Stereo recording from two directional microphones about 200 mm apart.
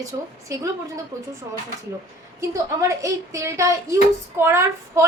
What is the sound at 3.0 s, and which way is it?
A woman's voice, 15° right (ahead or behind).